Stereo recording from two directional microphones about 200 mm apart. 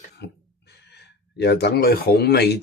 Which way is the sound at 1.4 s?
55° left (ahead or behind).